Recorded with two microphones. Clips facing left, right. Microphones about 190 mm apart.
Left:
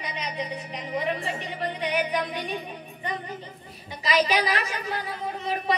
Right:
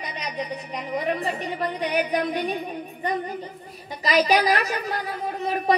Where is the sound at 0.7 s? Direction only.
45° right (ahead or behind).